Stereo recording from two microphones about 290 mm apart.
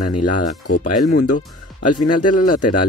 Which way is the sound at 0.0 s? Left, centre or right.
Left.